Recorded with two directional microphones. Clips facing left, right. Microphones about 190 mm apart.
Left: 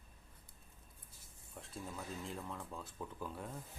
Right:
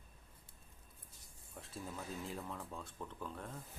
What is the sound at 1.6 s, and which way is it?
Speech, centre (ahead or behind).